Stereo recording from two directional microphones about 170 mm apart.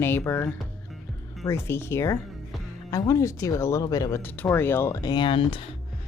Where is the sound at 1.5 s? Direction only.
15° left (ahead or behind).